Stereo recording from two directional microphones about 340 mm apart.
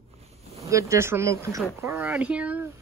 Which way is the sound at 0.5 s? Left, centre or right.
Centre.